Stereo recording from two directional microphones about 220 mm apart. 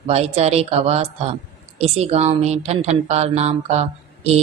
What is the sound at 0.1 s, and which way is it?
Speech, 30° right (ahead or behind).